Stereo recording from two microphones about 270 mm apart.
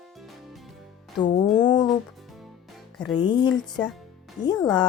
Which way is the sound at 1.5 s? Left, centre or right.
Left.